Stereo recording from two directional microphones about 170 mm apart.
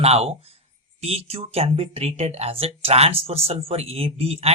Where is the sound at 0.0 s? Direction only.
35° right (ahead or behind).